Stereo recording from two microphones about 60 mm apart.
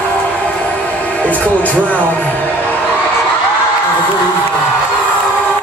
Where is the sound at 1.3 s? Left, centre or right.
Left.